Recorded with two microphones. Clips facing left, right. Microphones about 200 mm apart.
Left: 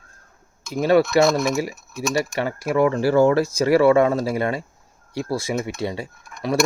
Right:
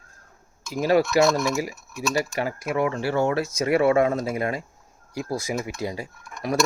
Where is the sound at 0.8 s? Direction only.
25° left (ahead or behind).